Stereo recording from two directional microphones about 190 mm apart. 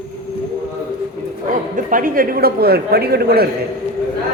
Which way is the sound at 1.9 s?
45° right (ahead or behind).